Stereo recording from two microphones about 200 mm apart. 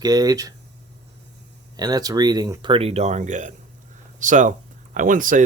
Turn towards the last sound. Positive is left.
turn(degrees=-40)  # may be behind; listen again after turning